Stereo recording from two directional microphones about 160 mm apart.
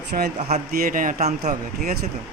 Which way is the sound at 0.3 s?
45° right (ahead or behind).